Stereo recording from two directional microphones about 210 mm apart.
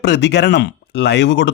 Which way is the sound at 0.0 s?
55° left (ahead or behind).